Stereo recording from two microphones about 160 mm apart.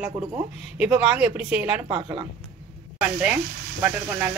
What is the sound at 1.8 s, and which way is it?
Speech, 35° right (ahead or behind).